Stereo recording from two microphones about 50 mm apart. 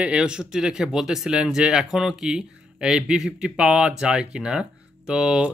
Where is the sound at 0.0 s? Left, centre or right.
Right.